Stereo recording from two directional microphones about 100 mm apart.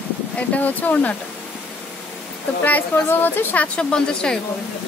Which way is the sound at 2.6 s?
20° left (ahead or behind).